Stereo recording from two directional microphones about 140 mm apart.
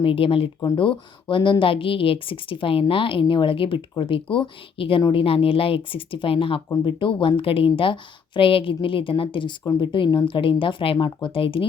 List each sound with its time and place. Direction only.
0.0 s speech: 40° left (ahead or behind)